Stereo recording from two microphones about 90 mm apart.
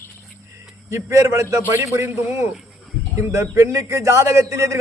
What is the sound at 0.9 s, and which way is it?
A man's voice, 30° right (ahead or behind).